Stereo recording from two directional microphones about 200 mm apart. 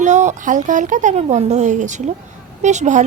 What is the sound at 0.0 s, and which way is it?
A woman's voice, 35° right (ahead or behind).